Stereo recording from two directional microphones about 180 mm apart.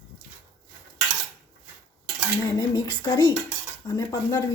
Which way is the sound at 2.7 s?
25° left (ahead or behind).